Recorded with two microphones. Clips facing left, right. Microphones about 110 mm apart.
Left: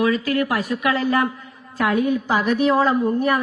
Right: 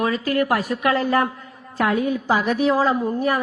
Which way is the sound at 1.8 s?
30° right (ahead or behind).